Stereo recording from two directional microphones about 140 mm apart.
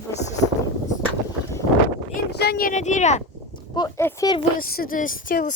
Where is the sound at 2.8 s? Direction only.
55° left (ahead or behind).